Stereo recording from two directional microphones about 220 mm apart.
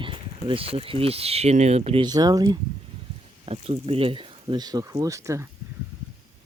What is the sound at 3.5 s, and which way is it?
Speech, 25° right (ahead or behind).